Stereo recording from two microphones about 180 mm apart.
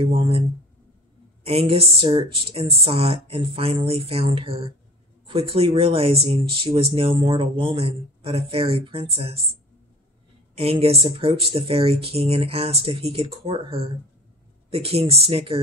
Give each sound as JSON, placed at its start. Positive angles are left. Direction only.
{"t": 0.0, "sound": "speech", "side_deg": -30}
{"t": 1.4, "sound": "speech", "side_deg": -30}
{"t": 10.5, "sound": "speech", "side_deg": -30}